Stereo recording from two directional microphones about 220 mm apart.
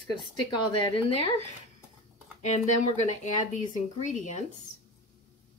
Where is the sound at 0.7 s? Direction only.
25° left (ahead or behind).